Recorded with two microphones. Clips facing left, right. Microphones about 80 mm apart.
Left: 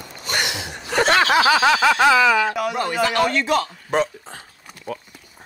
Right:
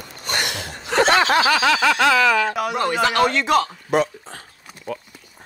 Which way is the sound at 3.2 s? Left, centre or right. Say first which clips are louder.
Right 2 dB; right.